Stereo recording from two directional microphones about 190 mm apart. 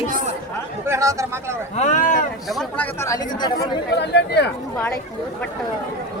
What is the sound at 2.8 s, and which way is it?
Speech, 15° left (ahead or behind).